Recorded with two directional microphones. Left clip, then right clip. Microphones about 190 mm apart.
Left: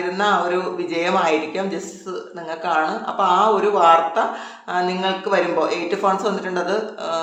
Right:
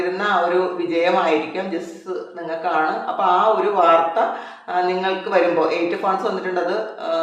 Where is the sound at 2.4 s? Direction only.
35° left (ahead or behind).